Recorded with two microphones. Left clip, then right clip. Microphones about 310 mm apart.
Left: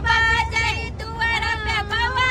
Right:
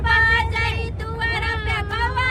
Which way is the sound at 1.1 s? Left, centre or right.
Centre.